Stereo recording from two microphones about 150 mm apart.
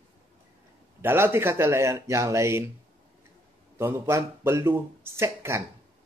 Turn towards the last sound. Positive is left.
turn(degrees=-15)  # may be behind; listen again after turning